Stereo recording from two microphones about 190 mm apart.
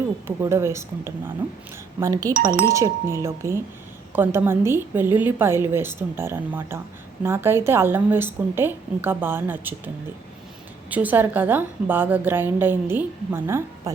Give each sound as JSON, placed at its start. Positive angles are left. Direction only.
{"t": 0.3, "sound": "a woman's voice", "side_deg": -15}
{"t": 2.3, "sound": "speech", "side_deg": -50}
{"t": 2.6, "sound": "a woman's voice", "side_deg": -15}